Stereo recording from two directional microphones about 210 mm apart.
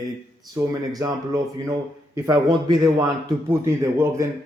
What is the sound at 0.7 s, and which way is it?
Speech, 15° right (ahead or behind).